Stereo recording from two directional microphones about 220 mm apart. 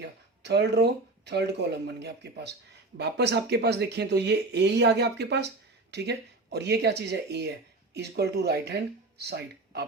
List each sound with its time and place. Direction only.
0.0 s speech: 50° right (ahead or behind)